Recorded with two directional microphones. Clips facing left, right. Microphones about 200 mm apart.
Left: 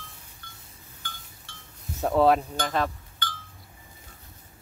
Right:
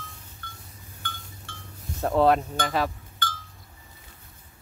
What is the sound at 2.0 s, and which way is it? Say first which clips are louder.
Speech: even; centre (ahead or behind).